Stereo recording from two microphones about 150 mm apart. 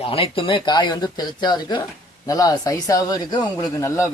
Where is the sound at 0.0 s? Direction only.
40° left (ahead or behind).